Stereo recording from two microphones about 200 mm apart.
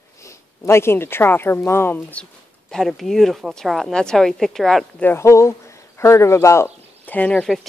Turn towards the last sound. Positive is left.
turn(degrees=5)  # may be behind; listen again after turning